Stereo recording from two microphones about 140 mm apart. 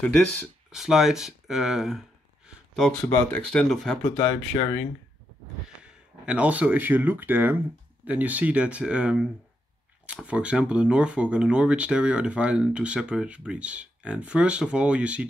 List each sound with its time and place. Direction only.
0.7 s a sound: 5° right (ahead or behind)
3.1 s speech: 10° left (ahead or behind)
4.0 s speech: 20° left (ahead or behind)
5.8 s speech: 5° right (ahead or behind)